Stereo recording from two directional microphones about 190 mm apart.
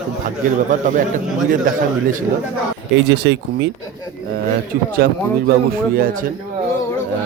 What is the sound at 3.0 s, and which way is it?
Speech, 65° right (ahead or behind).